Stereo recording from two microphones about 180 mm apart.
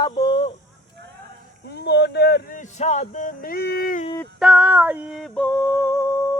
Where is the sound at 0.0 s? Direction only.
25° left (ahead or behind).